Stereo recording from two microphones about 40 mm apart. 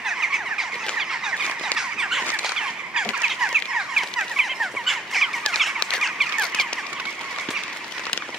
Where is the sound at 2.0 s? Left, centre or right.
Centre.